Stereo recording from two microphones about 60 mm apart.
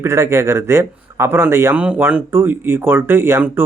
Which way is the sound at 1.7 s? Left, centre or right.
Right.